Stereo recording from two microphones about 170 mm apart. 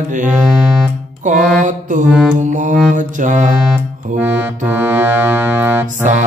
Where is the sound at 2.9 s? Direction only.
50° right (ahead or behind).